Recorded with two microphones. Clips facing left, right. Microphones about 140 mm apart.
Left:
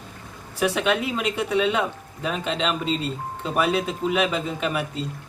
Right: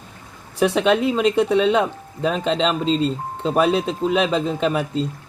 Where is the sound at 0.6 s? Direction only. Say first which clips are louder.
Right 5 dB; 30° right (ahead or behind).